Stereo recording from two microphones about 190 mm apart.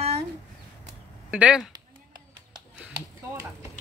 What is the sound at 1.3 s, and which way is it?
Speech, 5° right (ahead or behind).